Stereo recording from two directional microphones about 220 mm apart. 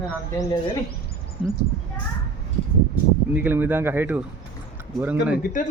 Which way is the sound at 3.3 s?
10° right (ahead or behind).